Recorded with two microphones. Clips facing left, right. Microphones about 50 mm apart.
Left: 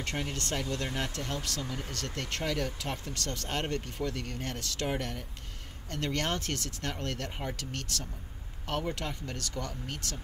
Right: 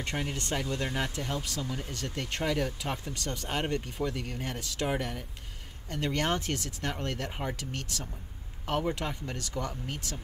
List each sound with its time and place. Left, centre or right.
0.0 s speech: centre
1.6 s speech: centre
2.0 s speech: centre